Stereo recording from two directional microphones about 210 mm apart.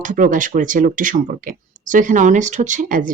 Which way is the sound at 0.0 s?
40° right (ahead or behind).